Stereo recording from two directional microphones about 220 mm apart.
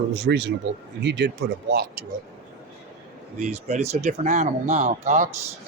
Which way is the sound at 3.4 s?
30° right (ahead or behind).